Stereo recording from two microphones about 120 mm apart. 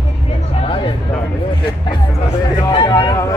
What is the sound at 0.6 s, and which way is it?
Music, 50° left (ahead or behind).